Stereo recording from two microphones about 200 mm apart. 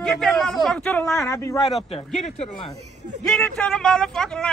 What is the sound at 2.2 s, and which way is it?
Speech, 30° left (ahead or behind).